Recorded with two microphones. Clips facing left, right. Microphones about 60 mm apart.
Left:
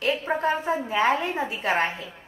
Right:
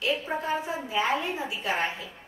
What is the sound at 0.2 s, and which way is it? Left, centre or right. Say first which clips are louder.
A woman's voice: left 5 dB; left.